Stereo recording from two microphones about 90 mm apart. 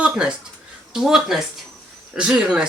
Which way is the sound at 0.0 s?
10° right (ahead or behind).